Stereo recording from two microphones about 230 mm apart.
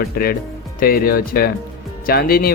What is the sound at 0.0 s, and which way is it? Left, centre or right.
Speech, left.